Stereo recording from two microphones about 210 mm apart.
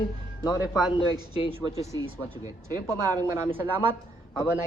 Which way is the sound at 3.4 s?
10° right (ahead or behind).